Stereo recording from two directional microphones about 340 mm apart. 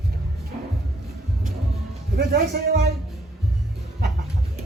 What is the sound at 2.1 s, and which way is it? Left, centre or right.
Music, right.